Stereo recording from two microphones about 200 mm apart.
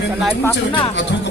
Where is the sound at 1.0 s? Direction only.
60° left (ahead or behind).